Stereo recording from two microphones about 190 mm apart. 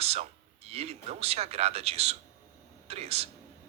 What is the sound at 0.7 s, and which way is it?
Speech, 35° right (ahead or behind).